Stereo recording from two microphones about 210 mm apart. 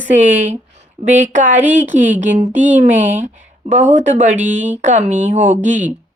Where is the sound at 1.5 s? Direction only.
10° right (ahead or behind).